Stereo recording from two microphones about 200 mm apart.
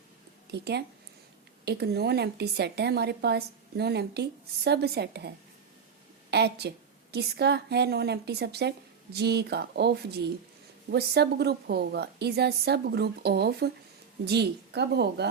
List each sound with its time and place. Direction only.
0.5 s a woman's voice: 55° right (ahead or behind)
6.3 s a woman's voice: 55° right (ahead or behind)